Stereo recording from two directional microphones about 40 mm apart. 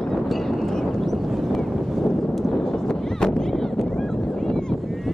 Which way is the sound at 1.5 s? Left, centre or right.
Centre.